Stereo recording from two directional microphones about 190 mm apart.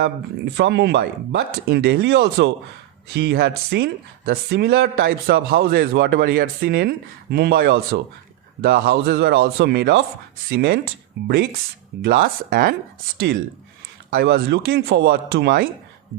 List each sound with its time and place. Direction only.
0.0 s speech: 65° right (ahead or behind)